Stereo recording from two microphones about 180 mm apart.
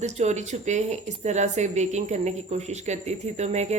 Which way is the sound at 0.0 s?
40° right (ahead or behind).